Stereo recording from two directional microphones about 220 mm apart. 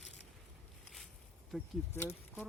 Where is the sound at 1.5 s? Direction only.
Centre (ahead or behind).